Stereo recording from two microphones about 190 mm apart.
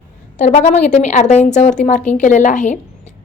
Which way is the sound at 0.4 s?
35° left (ahead or behind).